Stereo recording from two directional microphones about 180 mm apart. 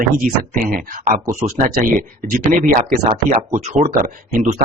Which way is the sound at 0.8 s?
50° right (ahead or behind).